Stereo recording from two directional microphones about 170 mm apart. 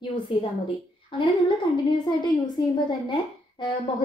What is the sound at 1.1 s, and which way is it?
A woman's voice, 30° left (ahead or behind).